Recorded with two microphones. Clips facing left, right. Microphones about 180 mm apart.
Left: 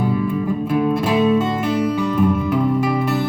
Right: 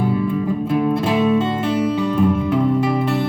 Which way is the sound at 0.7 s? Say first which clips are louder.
Even; 25° right (ahead or behind).